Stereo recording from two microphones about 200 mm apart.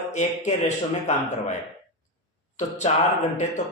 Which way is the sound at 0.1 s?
35° left (ahead or behind).